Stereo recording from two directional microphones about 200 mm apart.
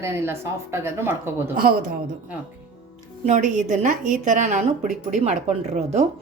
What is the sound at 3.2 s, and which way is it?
Speech, 35° right (ahead or behind).